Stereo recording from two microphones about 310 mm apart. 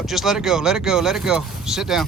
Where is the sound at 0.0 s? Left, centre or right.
Centre.